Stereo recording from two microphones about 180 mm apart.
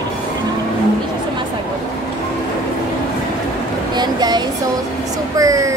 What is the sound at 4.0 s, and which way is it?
Speech, 25° right (ahead or behind).